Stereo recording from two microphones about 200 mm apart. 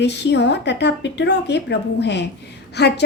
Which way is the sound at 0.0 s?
60° left (ahead or behind).